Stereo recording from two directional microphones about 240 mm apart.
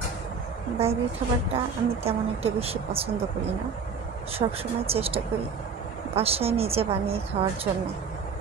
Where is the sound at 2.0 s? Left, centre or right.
Right.